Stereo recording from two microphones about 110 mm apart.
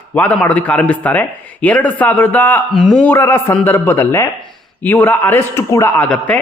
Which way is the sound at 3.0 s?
20° left (ahead or behind).